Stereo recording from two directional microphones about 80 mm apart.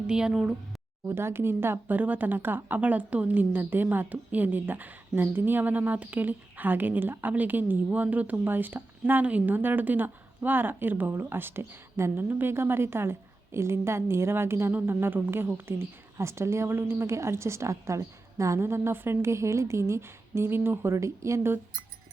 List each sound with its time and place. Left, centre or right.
0.1 s speech: centre
1.0 s a woman's voice: right